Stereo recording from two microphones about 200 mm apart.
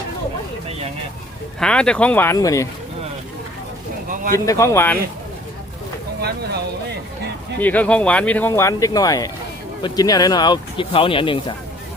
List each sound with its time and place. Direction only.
1.5 s speech: 5° left (ahead or behind)
4.4 s speech: 15° left (ahead or behind)
6.2 s speech: 55° right (ahead or behind)
7.6 s speech: 10° left (ahead or behind); by 11.5 s 25° left (ahead or behind)